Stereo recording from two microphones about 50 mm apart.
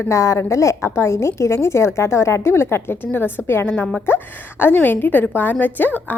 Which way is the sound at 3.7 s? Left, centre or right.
Left.